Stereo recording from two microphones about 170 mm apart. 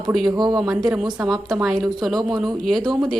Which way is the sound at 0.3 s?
25° right (ahead or behind).